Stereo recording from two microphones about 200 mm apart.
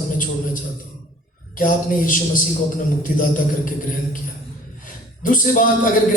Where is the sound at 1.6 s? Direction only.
40° left (ahead or behind).